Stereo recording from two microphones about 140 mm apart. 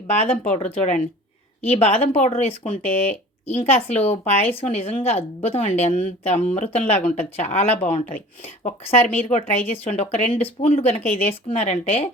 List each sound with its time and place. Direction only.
0.2 s speech: 55° left (ahead or behind)